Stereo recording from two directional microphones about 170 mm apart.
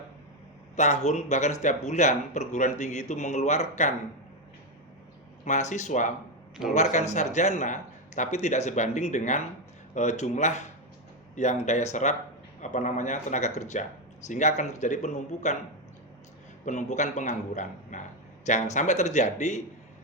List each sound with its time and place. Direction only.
0.8 s speech: 45° left (ahead or behind)
5.5 s speech: 45° left (ahead or behind)
16.6 s speech: 45° left (ahead or behind)